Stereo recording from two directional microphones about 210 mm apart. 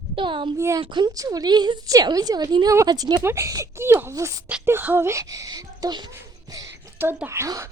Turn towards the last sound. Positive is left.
turn(degrees=-15)  # may be behind; listen again after turning